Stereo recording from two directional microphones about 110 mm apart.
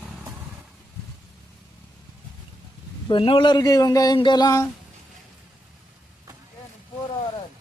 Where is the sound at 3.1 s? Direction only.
50° left (ahead or behind).